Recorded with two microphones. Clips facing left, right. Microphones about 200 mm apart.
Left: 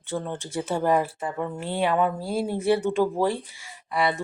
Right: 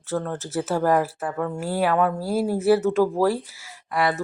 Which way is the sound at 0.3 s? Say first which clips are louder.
Right 3 dB; centre (ahead or behind).